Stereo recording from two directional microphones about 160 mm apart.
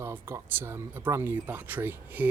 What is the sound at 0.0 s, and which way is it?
Speech, 15° right (ahead or behind).